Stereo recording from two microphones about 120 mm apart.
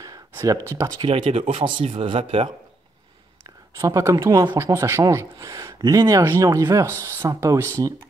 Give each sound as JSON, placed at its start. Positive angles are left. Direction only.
{"t": 0.0, "sound": "a sound", "side_deg": -25}
{"t": 0.7, "sound": "speech", "side_deg": -25}
{"t": 1.0, "sound": "speech", "side_deg": -45}
{"t": 3.7, "sound": "speech", "side_deg": -25}